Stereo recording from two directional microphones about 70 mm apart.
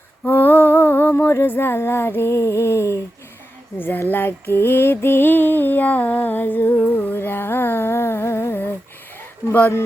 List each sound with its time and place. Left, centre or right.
0.3 s a sound: left
3.8 s speech: left
4.1 s music: left
9.5 s speech: left